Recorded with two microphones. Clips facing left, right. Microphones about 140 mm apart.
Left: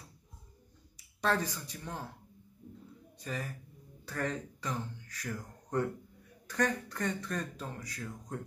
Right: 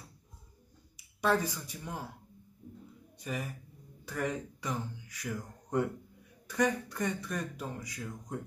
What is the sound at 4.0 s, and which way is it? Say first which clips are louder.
Speech: right 1 dB; 15° right (ahead or behind).